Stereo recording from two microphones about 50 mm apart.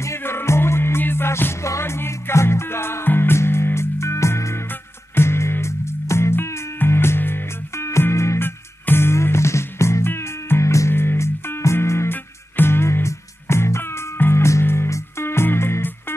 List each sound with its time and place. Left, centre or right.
0.2 s music: left
5.1 s music: left
7.2 s music: left
7.7 s music: left
8.4 s music: left
10.9 s music: left
12.1 s music: left
14.9 s music: left
15.2 s music: left